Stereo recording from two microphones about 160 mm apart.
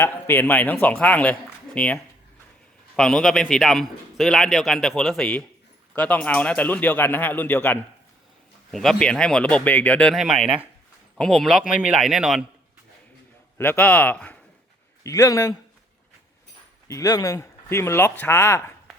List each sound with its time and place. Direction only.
0.0 s a man's voice: 15° left (ahead or behind)
8.7 s a man's voice: centre (ahead or behind)
13.6 s speech: 10° left (ahead or behind)
15.0 s a man's voice: 20° left (ahead or behind)
16.9 s speech: 20° left (ahead or behind)